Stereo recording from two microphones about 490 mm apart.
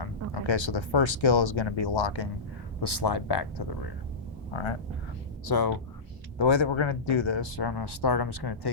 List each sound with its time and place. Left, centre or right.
0.0 s speech: left
4.5 s speech: left
5.5 s speech: left
6.4 s speech: left